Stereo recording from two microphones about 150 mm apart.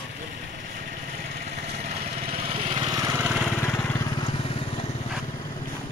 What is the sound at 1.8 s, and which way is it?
Lawn mower, 40° right (ahead or behind).